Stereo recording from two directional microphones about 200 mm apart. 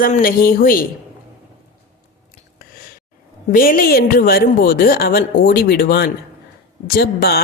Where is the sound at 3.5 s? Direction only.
45° left (ahead or behind).